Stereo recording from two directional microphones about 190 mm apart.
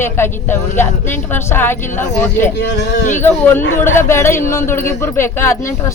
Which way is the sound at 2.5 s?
65° left (ahead or behind).